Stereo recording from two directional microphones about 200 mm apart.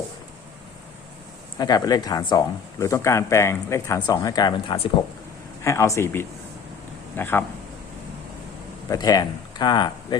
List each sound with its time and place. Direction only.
1.5 s speech: 20° left (ahead or behind)
8.9 s speech: 20° left (ahead or behind)